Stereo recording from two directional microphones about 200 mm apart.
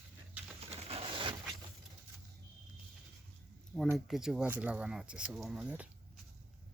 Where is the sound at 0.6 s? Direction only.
30° right (ahead or behind).